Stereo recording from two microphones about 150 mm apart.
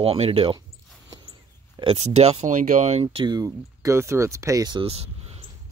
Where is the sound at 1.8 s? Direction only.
40° right (ahead or behind).